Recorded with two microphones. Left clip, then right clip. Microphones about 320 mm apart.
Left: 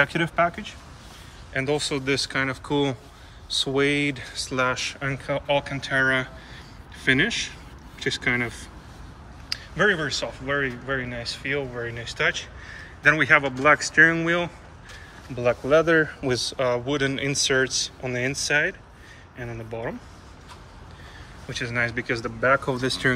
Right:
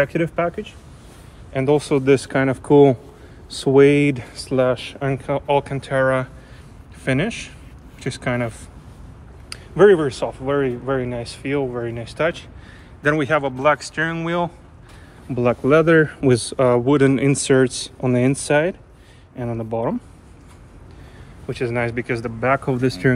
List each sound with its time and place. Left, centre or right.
0.0 s speech: centre
1.5 s speech: centre
15.4 s speech: centre
21.5 s speech: centre